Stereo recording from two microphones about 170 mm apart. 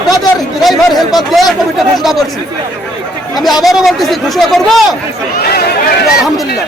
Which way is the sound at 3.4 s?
Centre (ahead or behind).